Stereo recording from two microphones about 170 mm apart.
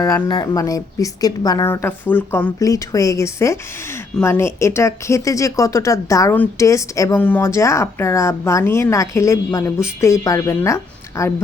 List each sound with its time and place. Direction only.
0.0 s speech: 25° left (ahead or behind)